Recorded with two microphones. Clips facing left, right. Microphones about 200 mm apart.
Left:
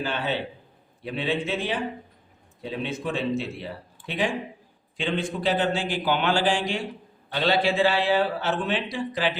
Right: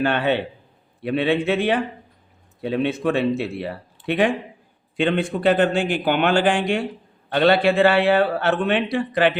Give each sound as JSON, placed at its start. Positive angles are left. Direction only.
{"t": 0.0, "sound": "a man's voice", "side_deg": -65}